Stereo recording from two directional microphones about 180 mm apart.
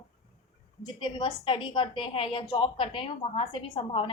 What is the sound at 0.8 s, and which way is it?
A woman's voice, 25° left (ahead or behind).